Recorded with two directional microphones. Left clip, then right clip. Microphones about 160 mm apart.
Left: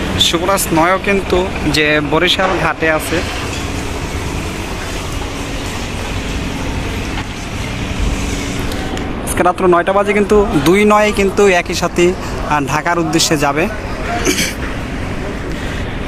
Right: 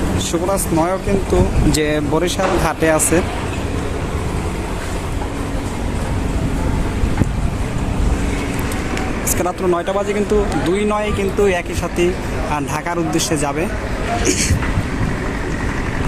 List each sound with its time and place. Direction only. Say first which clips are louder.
0.4 s speech: left 4 dB; 10° left (ahead or behind)
0.9 s speech: left 5 dB; 5° right (ahead or behind)
1.7 s speech: left 7 dB; 20° right (ahead or behind)
9.4 s speech: left 8 dB; centre (ahead or behind)